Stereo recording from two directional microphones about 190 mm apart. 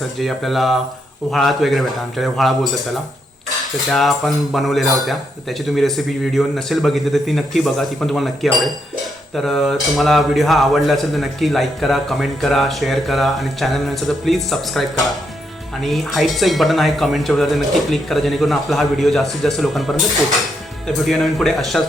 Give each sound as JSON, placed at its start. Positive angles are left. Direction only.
{"t": 0.2, "sound": "a man's voice", "side_deg": 0}